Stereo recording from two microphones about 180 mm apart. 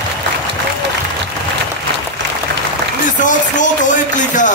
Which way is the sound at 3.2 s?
45° left (ahead or behind).